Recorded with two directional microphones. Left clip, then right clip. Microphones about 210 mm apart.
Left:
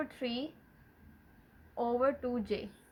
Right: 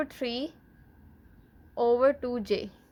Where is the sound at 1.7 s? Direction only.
55° right (ahead or behind).